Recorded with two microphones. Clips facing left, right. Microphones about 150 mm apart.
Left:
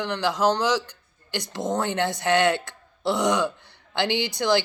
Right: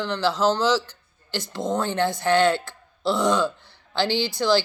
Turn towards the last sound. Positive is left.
turn(degrees=20)  # may be behind; listen again after turning